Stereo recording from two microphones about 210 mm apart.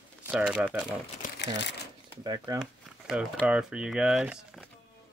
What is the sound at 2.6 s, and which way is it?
Speech, 5° right (ahead or behind).